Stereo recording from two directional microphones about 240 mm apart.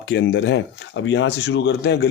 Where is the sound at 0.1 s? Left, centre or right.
Left.